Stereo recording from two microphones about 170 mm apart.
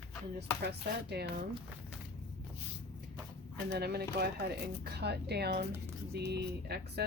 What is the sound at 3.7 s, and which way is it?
Speech, 70° right (ahead or behind).